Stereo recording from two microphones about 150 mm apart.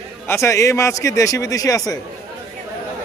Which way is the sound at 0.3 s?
20° left (ahead or behind).